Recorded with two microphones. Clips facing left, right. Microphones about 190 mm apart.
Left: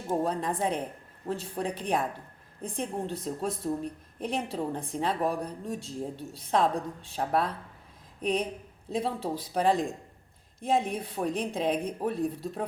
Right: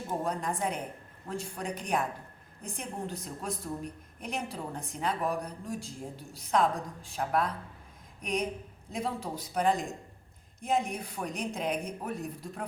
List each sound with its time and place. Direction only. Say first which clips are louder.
0.3 s a woman's voice: left 3 dB; 30° left (ahead or behind)